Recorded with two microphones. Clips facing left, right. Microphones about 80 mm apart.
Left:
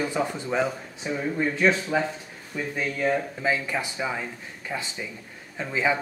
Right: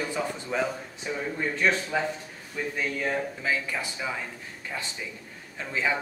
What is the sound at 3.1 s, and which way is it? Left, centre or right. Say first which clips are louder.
Speech: left 6 dB; centre.